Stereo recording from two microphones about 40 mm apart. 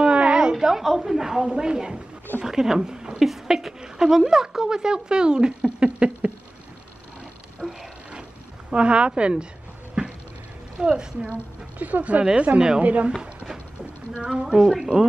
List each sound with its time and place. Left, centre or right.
0.0 s a sound: right
0.8 s speech: centre
1.4 s a woman's voice: right
7.6 s a sound: centre
8.6 s a woman's voice: right
10.0 s a sound: right
10.8 s a woman's voice: right
11.8 s a woman's voice: right
14.2 s a woman's voice: right
14.6 s speech: centre